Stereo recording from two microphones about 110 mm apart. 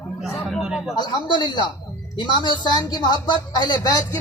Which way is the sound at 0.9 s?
45° left (ahead or behind).